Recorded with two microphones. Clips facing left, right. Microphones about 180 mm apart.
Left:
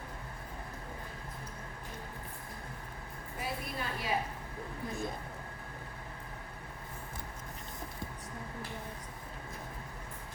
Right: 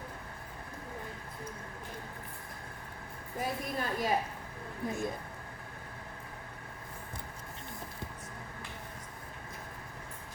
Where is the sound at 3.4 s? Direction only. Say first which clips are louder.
Right 4 dB; 45° right (ahead or behind).